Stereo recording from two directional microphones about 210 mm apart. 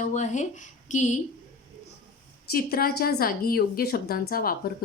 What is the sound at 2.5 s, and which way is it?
A woman's voice, 45° left (ahead or behind).